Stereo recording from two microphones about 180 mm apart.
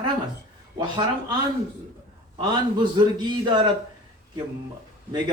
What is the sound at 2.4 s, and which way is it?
Speech, 25° right (ahead or behind).